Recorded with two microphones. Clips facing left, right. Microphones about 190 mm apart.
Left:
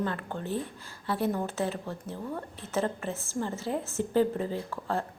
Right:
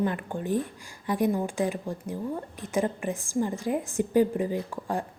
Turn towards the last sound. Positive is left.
turn(degrees=-15)  # may be behind; listen again after turning